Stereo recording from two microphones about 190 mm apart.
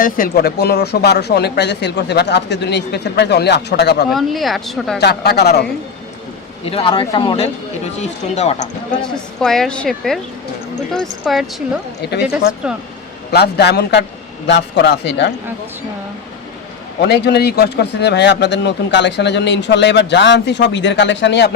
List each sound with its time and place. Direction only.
0.0 s a man's voice: 50° left (ahead or behind)
4.1 s speech: centre (ahead or behind)
4.9 s a man's voice: 60° left (ahead or behind)
6.7 s speech: 30° left (ahead or behind)
9.4 s speech: 5° left (ahead or behind)
12.6 s speech: 5° right (ahead or behind)
13.3 s a man's voice: 60° left (ahead or behind)
17.0 s a man's voice: 60° left (ahead or behind)